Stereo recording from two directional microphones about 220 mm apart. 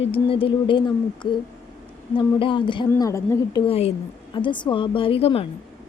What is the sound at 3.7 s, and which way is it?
A woman's voice, 30° left (ahead or behind).